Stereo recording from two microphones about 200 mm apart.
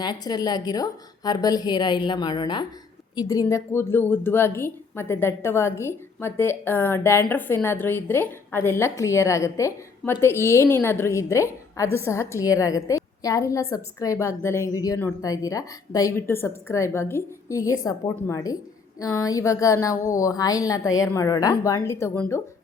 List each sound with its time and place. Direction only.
0.0 s a woman's voice: 20° left (ahead or behind)